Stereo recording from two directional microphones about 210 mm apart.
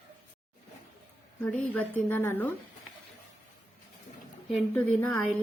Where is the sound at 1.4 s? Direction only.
5° left (ahead or behind).